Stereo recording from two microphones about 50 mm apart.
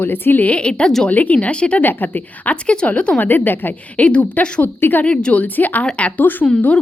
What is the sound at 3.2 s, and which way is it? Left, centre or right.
Speech, left.